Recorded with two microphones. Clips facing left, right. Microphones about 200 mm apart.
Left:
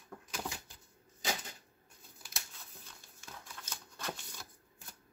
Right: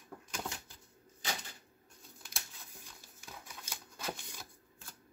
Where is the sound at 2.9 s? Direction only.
10° right (ahead or behind).